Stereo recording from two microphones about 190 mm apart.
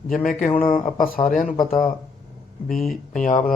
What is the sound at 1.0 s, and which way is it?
Speech, 45° left (ahead or behind).